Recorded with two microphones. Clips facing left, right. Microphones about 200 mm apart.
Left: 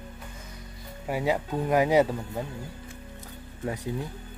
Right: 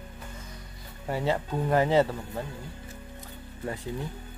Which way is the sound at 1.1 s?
10° left (ahead or behind).